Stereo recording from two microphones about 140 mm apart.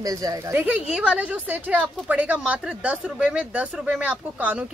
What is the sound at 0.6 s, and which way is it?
Speech, 10° right (ahead or behind).